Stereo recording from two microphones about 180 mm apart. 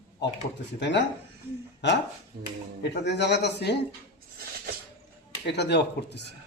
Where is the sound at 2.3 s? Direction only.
65° right (ahead or behind).